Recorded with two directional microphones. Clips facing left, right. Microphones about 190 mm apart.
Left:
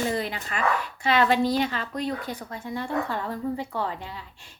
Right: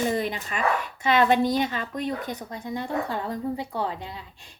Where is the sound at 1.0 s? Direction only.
20° right (ahead or behind).